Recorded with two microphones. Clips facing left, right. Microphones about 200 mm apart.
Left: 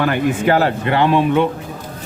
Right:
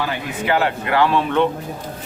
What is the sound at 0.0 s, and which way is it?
Speech, 55° left (ahead or behind).